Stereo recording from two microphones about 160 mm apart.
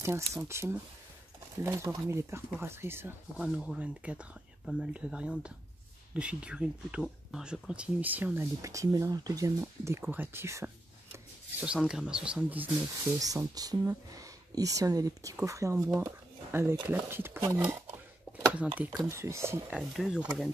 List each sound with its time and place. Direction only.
0.0 s speech: 15° right (ahead or behind)
3.4 s speech: 5° right (ahead or behind)
11.6 s speech: 5° right (ahead or behind)
13.2 s speech: 20° right (ahead or behind)
18.8 s speech: 10° right (ahead or behind)
20.0 s speech: 5° right (ahead or behind)